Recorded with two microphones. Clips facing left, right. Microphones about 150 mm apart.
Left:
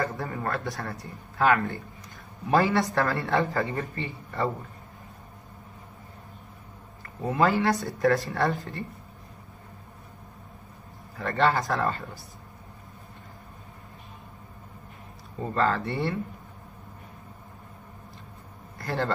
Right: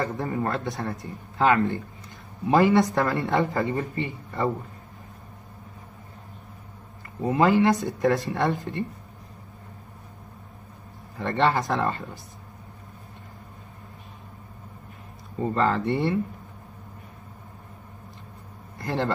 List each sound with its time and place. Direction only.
0.0 s speech: 20° right (ahead or behind)
7.2 s speech: 20° right (ahead or behind)
11.1 s speech: 20° right (ahead or behind)
15.4 s speech: 15° right (ahead or behind)
18.8 s a man's voice: 20° right (ahead or behind)